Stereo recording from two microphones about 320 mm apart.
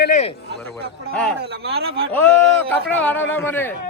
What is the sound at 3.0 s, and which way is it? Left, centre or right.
Speech, centre.